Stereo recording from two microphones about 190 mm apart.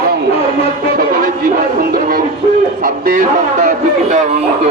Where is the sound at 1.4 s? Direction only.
50° right (ahead or behind).